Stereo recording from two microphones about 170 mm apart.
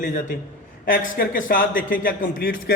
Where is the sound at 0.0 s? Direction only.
50° left (ahead or behind).